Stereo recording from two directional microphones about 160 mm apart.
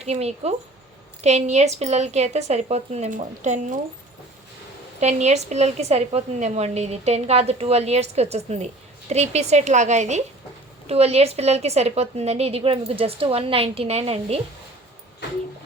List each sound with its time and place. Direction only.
0.0 s a woman's voice: 40° right (ahead or behind)
4.9 s a woman's voice: 45° right (ahead or behind)